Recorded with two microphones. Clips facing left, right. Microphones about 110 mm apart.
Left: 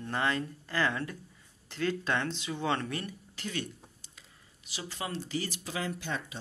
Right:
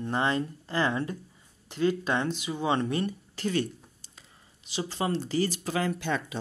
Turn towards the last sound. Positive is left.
turn(degrees=-70)  # may be behind; listen again after turning